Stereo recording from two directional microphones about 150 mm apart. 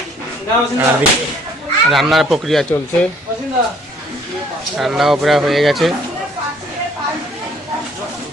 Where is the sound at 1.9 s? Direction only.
Centre (ahead or behind).